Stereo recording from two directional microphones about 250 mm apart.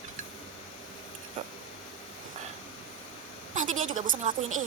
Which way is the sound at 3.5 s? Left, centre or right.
Right.